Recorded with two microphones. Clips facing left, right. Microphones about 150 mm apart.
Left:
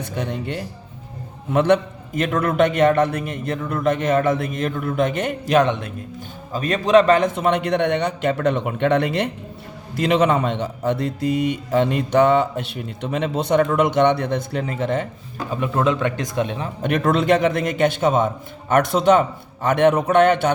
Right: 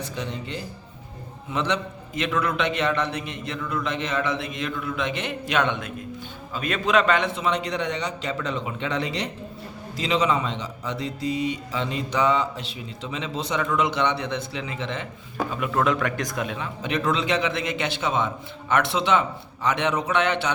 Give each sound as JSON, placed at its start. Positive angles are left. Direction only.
{"t": 0.0, "sound": "a man's voice", "side_deg": 60}
{"t": 15.6, "sound": "speech", "side_deg": 25}
{"t": 16.8, "sound": "a man's voice", "side_deg": 55}